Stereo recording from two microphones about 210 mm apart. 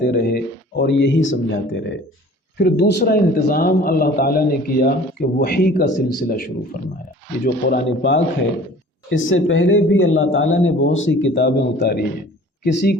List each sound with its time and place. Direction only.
0.0 s a man's voice: 45° left (ahead or behind)
7.4 s a man's voice: 55° left (ahead or behind)